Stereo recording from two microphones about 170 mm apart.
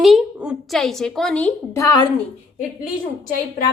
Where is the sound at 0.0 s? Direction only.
Centre (ahead or behind).